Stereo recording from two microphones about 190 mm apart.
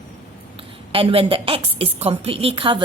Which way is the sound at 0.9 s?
30° right (ahead or behind).